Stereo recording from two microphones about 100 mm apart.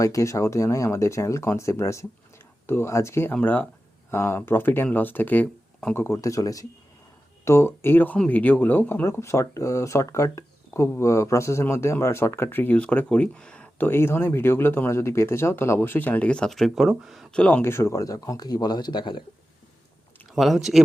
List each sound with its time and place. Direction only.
0.0 s speech: 35° left (ahead or behind); by 17.2 s 5° right (ahead or behind)
17.3 s speech: 15° left (ahead or behind); by 19.2 s 50° left (ahead or behind)
20.3 s speech: centre (ahead or behind)